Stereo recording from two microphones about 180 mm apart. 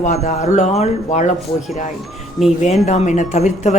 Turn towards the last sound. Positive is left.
turn(degrees=40)  # may be behind; listen again after turning